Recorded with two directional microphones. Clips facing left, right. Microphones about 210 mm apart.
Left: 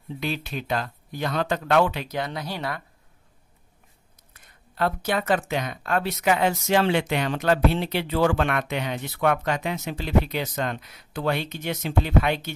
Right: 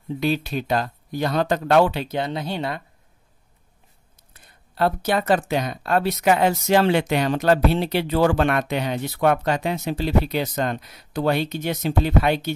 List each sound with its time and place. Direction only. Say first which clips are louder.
0.2 s speech: right 7 dB; 35° right (ahead or behind)
4.3 s speech: right 2 dB; 35° right (ahead or behind)